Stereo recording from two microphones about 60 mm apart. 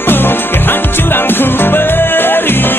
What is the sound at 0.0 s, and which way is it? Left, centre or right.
Music, left.